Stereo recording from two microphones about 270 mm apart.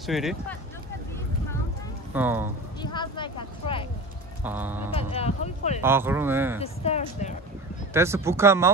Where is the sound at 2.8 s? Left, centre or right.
Centre.